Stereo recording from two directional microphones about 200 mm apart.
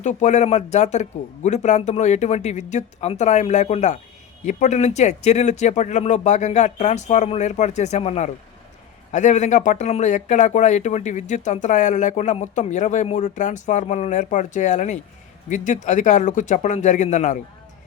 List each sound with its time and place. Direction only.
0.0 s speech: 35° left (ahead or behind)